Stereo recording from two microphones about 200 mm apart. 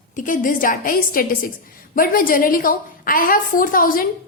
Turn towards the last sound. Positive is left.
turn(degrees=45)  # may be behind; listen again after turning